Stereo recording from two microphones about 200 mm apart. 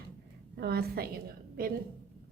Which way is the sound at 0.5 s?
50° right (ahead or behind).